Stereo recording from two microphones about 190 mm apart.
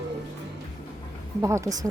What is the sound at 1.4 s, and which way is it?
Speech, 15° right (ahead or behind).